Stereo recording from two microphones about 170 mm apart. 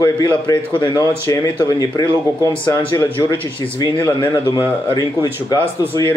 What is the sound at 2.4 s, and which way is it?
Speech, 15° right (ahead or behind).